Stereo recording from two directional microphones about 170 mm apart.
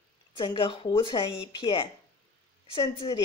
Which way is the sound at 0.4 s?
30° left (ahead or behind).